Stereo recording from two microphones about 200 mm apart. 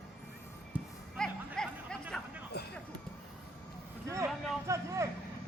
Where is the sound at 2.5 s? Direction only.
55° left (ahead or behind).